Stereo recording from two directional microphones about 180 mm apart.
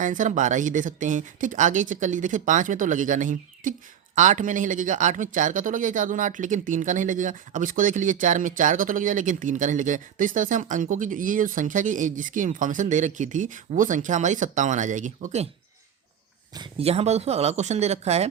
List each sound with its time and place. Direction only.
0.0 s speech: 45° right (ahead or behind)
16.6 s speech: 35° right (ahead or behind)